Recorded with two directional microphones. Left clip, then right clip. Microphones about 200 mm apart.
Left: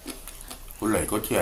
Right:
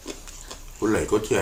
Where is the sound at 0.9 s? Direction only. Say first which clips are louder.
Right 4 dB; 20° left (ahead or behind).